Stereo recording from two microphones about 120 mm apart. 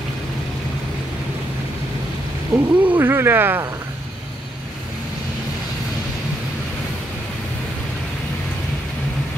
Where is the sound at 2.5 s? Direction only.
15° right (ahead or behind).